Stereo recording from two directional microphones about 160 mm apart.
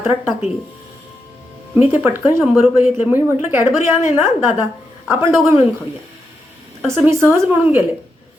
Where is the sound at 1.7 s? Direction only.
15° right (ahead or behind).